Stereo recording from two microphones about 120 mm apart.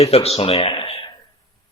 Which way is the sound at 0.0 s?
60° left (ahead or behind).